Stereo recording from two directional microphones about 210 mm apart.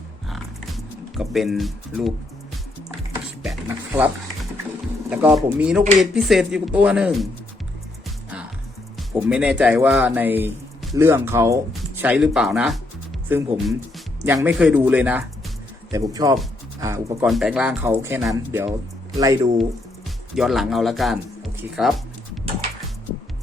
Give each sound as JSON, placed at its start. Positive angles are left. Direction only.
{"t": 1.1, "sound": "speech", "side_deg": 0}
{"t": 3.4, "sound": "a sound", "side_deg": -5}
{"t": 5.0, "sound": "speech", "side_deg": -5}
{"t": 9.1, "sound": "speech", "side_deg": -5}
{"t": 17.2, "sound": "speech", "side_deg": 0}
{"t": 20.3, "sound": "speech", "side_deg": 0}